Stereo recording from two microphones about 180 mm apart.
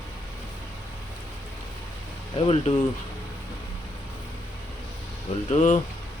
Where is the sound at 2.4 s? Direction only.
35° left (ahead or behind).